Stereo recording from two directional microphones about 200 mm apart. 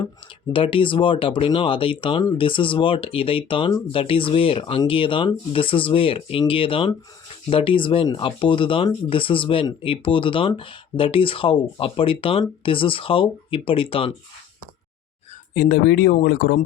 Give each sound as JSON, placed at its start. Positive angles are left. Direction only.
{"t": 0.5, "sound": "speech", "side_deg": 25}
{"t": 15.5, "sound": "speech", "side_deg": 50}